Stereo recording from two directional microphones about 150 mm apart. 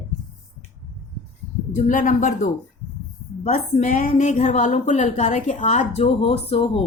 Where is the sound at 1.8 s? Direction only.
60° left (ahead or behind).